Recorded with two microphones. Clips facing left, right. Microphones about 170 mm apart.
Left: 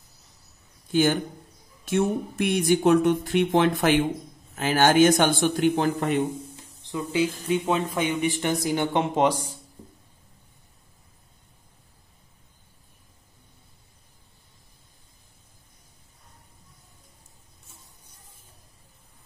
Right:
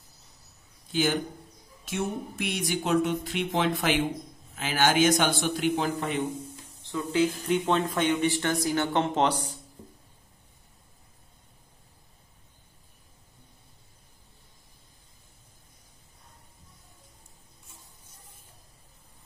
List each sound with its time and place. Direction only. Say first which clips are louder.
1.9 s a man's voice: left 7 dB; 55° left (ahead or behind)
6.9 s speech: even; 10° left (ahead or behind)